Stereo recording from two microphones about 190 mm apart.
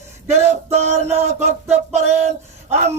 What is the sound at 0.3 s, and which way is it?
Music, 35° right (ahead or behind).